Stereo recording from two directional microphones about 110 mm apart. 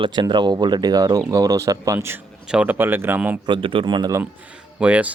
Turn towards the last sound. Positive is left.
turn(degrees=-10)  # may be behind; listen again after turning